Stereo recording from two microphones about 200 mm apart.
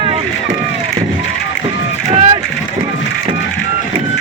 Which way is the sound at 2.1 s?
30° right (ahead or behind).